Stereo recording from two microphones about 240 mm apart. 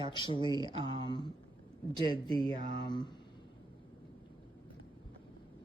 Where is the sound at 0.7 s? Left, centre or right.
Right.